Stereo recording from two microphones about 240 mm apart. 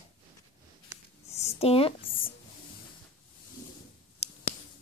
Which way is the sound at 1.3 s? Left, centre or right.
Left.